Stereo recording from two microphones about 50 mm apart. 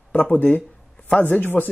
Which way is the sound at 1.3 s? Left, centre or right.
Left.